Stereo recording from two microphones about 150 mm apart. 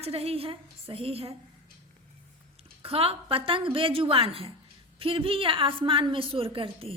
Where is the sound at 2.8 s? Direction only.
40° right (ahead or behind).